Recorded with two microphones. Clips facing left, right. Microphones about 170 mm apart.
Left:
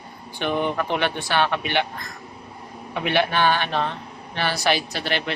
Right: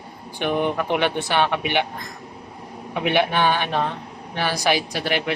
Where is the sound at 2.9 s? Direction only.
15° right (ahead or behind).